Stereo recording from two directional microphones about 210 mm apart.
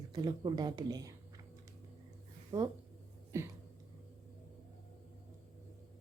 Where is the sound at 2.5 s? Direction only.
15° right (ahead or behind).